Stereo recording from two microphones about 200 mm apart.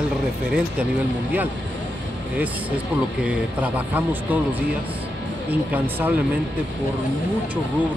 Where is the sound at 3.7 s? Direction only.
10° right (ahead or behind).